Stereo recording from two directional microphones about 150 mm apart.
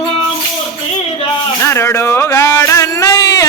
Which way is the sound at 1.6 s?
15° left (ahead or behind).